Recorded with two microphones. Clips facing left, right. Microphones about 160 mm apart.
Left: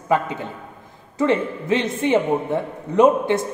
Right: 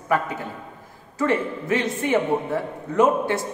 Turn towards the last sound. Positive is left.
turn(degrees=20)  # may be behind; listen again after turning